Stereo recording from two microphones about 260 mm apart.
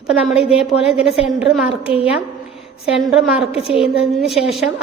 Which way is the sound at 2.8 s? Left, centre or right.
Centre.